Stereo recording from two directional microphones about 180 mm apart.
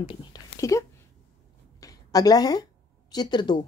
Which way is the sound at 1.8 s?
20° left (ahead or behind).